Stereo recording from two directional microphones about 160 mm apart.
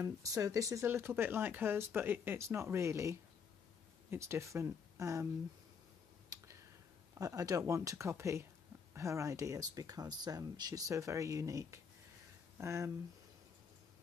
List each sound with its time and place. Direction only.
0.0 s speech: 20° right (ahead or behind)
6.3 s a sound: 20° right (ahead or behind)
7.2 s speech: 20° right (ahead or behind)